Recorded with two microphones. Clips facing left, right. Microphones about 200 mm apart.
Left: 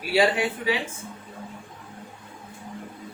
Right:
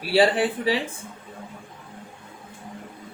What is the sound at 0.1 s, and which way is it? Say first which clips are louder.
Speech: right 2 dB; 35° right (ahead or behind).